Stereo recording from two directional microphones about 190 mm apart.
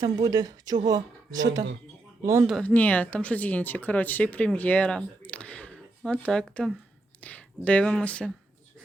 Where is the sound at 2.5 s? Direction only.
5° left (ahead or behind).